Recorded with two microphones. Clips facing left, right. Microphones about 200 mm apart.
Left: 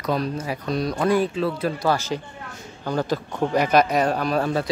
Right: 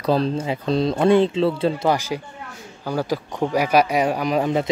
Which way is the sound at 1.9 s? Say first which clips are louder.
Right 1 dB; 10° right (ahead or behind).